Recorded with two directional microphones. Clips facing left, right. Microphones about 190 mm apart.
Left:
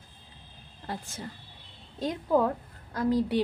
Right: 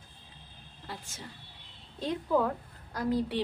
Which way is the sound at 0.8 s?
50° left (ahead or behind).